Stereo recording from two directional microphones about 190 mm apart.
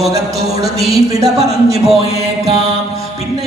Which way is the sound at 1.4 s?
35° right (ahead or behind).